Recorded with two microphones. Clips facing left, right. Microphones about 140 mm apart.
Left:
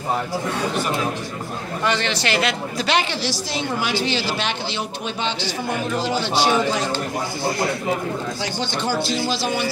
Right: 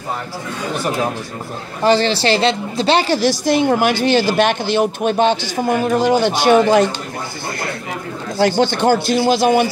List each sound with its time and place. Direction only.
1.8 s a woman's voice: 30° right (ahead or behind); by 6.9 s 55° right (ahead or behind)
8.4 s speech: 55° right (ahead or behind)